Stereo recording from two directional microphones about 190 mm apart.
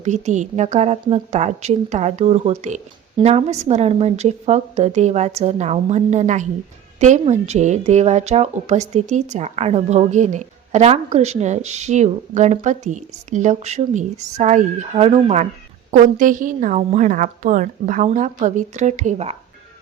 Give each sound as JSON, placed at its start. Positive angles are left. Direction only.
{"t": 0.0, "sound": "a woman's voice", "side_deg": -40}